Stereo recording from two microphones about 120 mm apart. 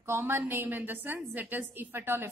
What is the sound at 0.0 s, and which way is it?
A woman's voice, 20° right (ahead or behind).